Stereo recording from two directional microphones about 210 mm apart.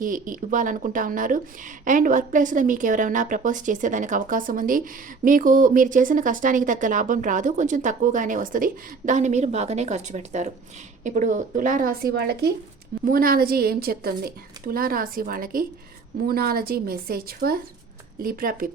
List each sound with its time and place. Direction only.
0.0 s a woman's voice: 40° right (ahead or behind)